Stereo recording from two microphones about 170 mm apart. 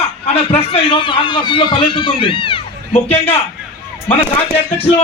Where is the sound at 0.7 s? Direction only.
30° left (ahead or behind).